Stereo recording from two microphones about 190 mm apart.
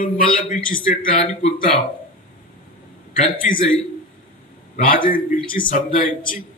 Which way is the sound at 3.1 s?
45° left (ahead or behind).